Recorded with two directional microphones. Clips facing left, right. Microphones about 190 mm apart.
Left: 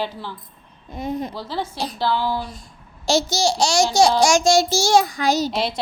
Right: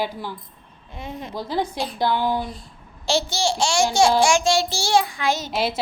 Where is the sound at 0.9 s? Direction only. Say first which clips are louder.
Left 7 dB; 40° left (ahead or behind).